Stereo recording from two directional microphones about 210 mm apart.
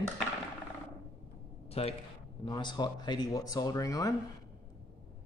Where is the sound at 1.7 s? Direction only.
30° left (ahead or behind).